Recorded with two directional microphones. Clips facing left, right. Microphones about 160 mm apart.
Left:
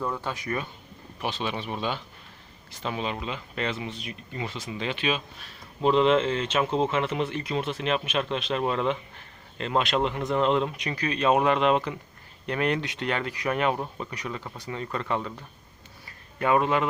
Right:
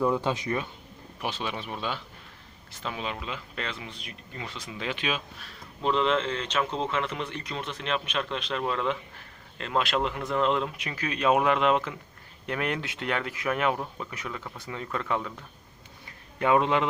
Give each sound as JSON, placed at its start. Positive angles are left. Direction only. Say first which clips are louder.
{"t": 0.0, "sound": "speech", "louder": "right 5 dB", "side_deg": -15}
{"t": 1.4, "sound": "speech", "louder": "left 3 dB", "side_deg": -5}
{"t": 4.9, "sound": "a man's voice", "louder": "left 4 dB", "side_deg": -10}
{"t": 5.8, "sound": "speech", "louder": "left 5 dB", "side_deg": 15}
{"t": 16.4, "sound": "a man's voice", "louder": "even", "side_deg": -15}